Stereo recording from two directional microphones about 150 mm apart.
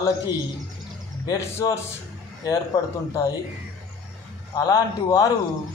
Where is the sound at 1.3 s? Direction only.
25° left (ahead or behind).